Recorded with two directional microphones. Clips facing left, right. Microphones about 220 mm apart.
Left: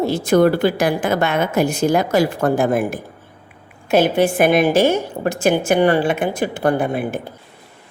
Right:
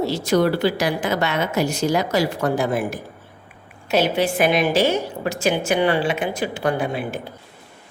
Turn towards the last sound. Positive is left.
turn(degrees=55)  # may be behind; listen again after turning